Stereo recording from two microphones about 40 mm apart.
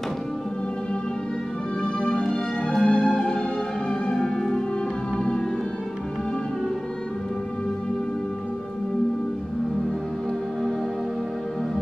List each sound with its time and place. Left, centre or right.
2.0 s music: left
2.2 s music: centre